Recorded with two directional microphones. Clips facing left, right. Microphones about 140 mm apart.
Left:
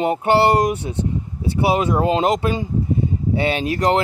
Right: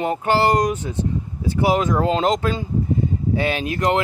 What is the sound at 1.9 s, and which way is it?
Speech, 20° left (ahead or behind).